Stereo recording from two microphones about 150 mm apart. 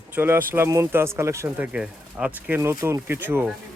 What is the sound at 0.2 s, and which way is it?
Speech, 15° right (ahead or behind).